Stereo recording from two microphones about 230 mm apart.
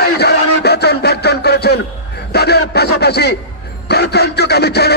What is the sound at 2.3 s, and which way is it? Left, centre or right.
A man's voice, left.